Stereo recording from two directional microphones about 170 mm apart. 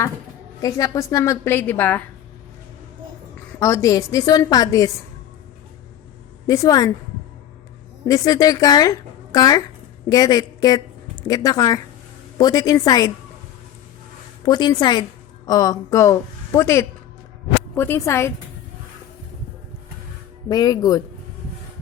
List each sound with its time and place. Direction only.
0.6 s a woman's voice: 20° left (ahead or behind)
3.6 s a woman's voice: 15° left (ahead or behind)
6.5 s a woman's voice: 20° left (ahead or behind)
8.0 s a woman's voice: 20° left (ahead or behind)
14.4 s a woman's voice: 25° left (ahead or behind)
20.5 s a woman's voice: 20° left (ahead or behind)